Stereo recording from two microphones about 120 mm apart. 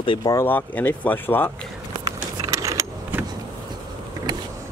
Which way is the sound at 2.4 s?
25° right (ahead or behind).